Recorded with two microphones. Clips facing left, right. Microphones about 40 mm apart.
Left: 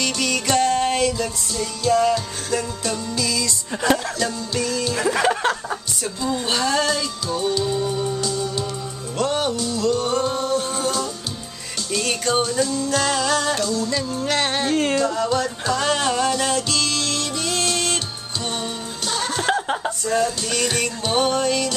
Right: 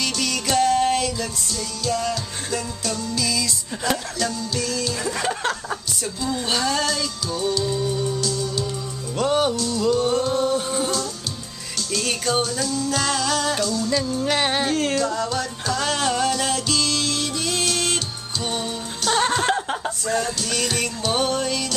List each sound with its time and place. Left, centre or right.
0.0 s music: centre
3.3 s music: centre; by 5.4 s left
5.4 s music: centre
9.2 s music: centre
11.9 s music: centre
14.3 s music: centre
19.7 s music: centre